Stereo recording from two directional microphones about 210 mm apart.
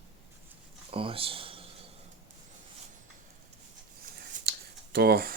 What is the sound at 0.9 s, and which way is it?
Speech, 25° right (ahead or behind).